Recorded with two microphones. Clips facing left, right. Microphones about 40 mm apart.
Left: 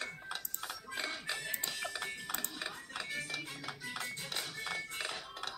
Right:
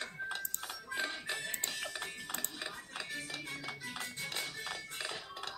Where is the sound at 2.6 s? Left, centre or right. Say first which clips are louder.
Left 1 dB; left.